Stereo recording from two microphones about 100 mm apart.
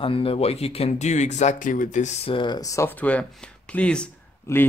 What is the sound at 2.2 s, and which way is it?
Speech, 60° left (ahead or behind).